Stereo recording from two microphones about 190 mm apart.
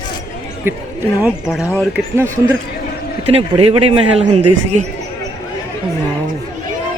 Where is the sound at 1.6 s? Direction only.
15° left (ahead or behind).